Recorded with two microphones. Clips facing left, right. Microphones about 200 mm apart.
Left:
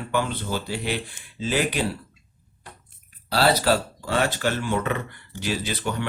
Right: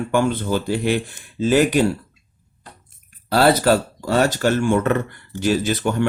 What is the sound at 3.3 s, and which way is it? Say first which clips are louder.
Speech: right 5 dB; 50° right (ahead or behind).